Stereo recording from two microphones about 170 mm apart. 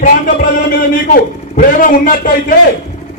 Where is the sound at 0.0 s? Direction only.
60° left (ahead or behind).